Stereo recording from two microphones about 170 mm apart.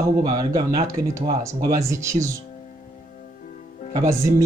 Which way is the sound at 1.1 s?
15° right (ahead or behind).